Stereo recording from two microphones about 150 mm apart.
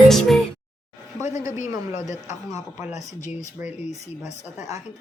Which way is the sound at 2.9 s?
50° left (ahead or behind).